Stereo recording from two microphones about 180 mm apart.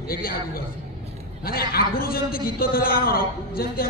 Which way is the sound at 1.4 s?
55° left (ahead or behind).